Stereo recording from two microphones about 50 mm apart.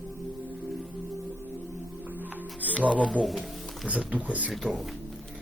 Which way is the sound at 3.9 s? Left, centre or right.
Right.